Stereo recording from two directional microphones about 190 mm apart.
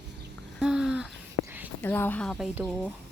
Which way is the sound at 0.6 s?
5° right (ahead or behind).